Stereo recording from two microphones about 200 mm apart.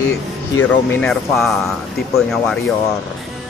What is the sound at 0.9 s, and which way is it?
Speech, 10° left (ahead or behind).